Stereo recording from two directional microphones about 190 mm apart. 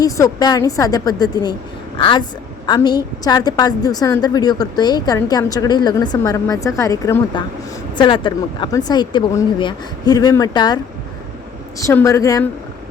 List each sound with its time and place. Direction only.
0.0 s a woman's voice: 20° left (ahead or behind)
11.8 s a woman's voice: 15° left (ahead or behind)